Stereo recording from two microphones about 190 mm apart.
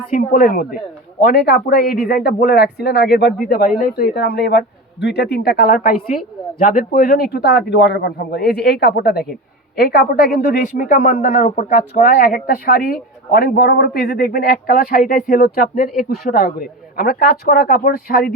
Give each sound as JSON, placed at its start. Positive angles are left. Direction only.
{"t": 0.1, "sound": "speech", "side_deg": 45}
{"t": 3.2, "sound": "speech", "side_deg": 0}
{"t": 3.8, "sound": "speech", "side_deg": 50}